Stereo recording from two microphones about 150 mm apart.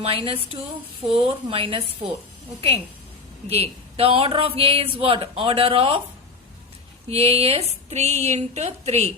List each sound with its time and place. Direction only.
0.0 s speech: 40° right (ahead or behind)
7.1 s speech: 40° right (ahead or behind)